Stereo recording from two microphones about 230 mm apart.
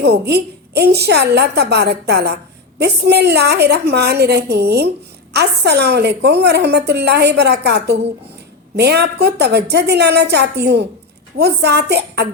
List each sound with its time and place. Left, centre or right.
0.0 s a woman's voice: right